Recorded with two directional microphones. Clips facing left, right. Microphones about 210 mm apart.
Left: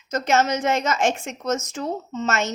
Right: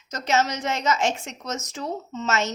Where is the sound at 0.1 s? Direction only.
55° left (ahead or behind).